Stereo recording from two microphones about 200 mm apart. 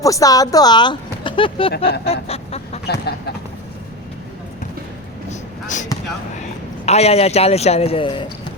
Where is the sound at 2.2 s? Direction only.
30° left (ahead or behind).